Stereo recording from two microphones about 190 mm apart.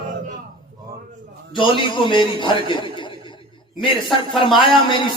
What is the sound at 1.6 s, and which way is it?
A man's voice, 25° left (ahead or behind).